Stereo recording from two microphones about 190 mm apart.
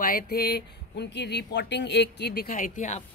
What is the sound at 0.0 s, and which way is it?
Speech, 50° left (ahead or behind).